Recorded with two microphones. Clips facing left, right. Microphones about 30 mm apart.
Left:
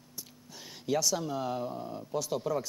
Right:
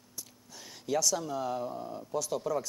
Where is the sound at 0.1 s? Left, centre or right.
Centre.